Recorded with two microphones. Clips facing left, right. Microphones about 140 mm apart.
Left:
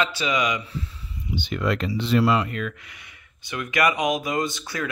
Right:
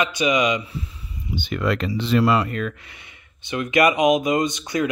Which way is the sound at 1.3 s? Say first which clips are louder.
Right 2 dB; 60° right (ahead or behind).